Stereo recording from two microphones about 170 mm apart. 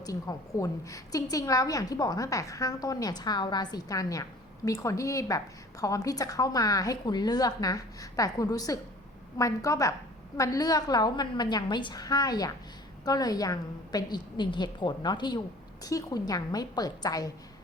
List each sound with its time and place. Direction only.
0.0 s a woman's voice: 20° left (ahead or behind)